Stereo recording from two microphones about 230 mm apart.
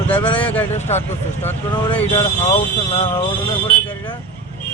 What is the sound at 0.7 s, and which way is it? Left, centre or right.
Speech, left.